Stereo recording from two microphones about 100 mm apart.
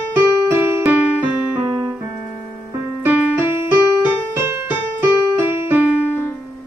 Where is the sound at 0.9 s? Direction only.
15° right (ahead or behind).